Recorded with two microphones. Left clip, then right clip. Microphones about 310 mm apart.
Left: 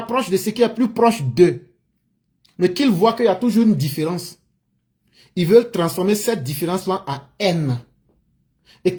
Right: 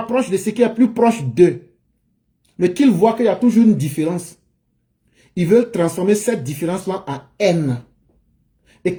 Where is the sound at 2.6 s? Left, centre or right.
Left.